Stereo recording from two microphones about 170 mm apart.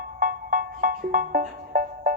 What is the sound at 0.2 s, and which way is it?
Music, 55° right (ahead or behind).